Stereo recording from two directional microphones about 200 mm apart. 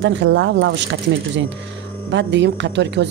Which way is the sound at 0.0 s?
65° right (ahead or behind).